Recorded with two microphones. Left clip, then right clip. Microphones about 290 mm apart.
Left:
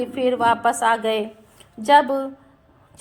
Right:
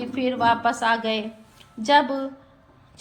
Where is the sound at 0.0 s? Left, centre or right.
Centre.